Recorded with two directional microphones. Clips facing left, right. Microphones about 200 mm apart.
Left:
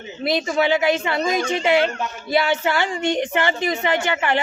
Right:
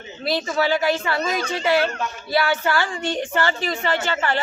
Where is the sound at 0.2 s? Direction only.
20° left (ahead or behind).